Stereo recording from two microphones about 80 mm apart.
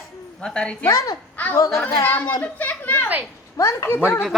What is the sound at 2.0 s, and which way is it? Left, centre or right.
Speech, left.